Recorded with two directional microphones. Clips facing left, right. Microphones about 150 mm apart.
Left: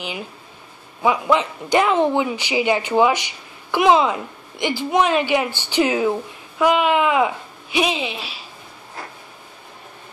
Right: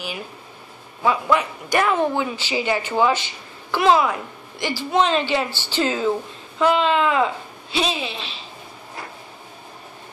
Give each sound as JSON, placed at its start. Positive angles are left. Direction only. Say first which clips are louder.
{"t": 1.0, "sound": "a man's voice", "louder": "left 2 dB", "side_deg": 15}